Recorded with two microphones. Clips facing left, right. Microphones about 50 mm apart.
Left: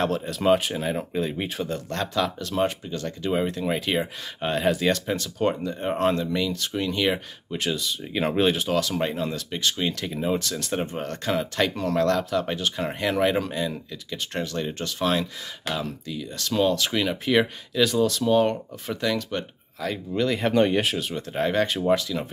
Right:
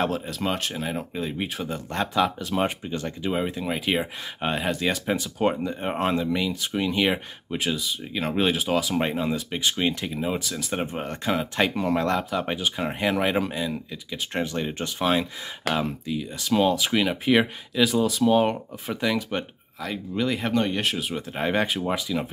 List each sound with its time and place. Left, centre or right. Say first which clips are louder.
0.0 s speech: left 3 dB; centre
1.9 s speech: right 4 dB; centre
3.3 s speech: left 2 dB; centre
5.0 s speech: right 1 dB; centre
8.1 s speech: left 2 dB; centre
14.4 s speech: right 1 dB; centre
20.5 s speech: left 6 dB; centre
20.8 s speech: even; centre